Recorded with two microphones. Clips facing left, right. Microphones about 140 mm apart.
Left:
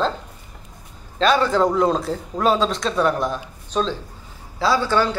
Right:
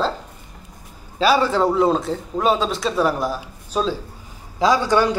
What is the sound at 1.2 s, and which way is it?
A man's voice, 5° right (ahead or behind).